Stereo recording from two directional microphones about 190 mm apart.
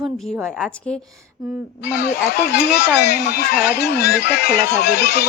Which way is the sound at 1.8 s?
60° left (ahead or behind).